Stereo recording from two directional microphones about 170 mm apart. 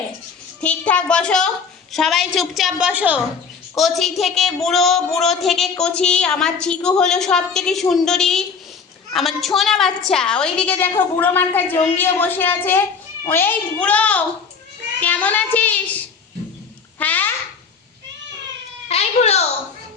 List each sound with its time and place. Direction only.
0.6 s a woman's voice: 5° left (ahead or behind)
17.0 s a sound: 10° left (ahead or behind)
18.9 s cat: 40° left (ahead or behind)